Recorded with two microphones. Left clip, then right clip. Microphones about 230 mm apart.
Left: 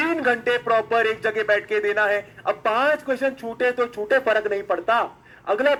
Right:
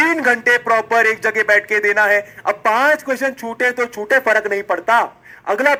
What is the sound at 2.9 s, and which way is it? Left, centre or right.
Speech, right.